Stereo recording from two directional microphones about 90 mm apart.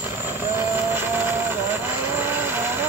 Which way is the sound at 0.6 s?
25° right (ahead or behind).